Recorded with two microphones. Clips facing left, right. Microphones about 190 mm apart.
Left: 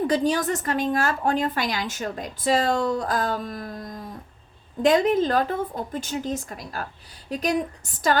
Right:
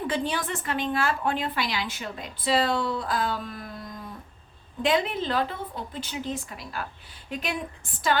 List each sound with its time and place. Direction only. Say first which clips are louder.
0.1 s a woman's voice: left 6 dB; 40° left (ahead or behind)